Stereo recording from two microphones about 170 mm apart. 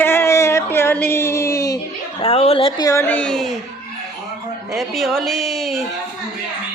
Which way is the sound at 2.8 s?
15° left (ahead or behind).